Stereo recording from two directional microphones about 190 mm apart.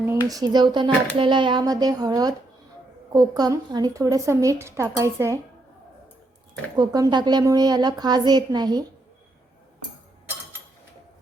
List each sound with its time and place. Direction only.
0.3 s a woman's voice: 20° right (ahead or behind)
6.7 s a woman's voice: 20° right (ahead or behind)